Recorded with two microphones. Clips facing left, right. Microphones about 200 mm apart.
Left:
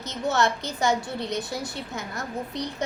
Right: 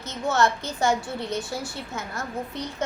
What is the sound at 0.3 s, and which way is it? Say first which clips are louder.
A woman's voice: right 3 dB; 15° left (ahead or behind).